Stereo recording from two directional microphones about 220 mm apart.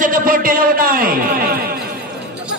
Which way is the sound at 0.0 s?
40° right (ahead or behind).